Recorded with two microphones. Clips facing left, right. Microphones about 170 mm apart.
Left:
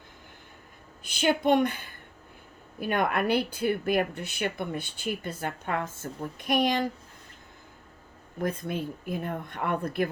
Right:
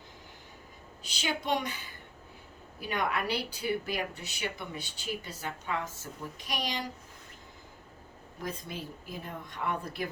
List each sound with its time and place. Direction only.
1.0 s speech: 55° left (ahead or behind)
8.4 s speech: 55° left (ahead or behind)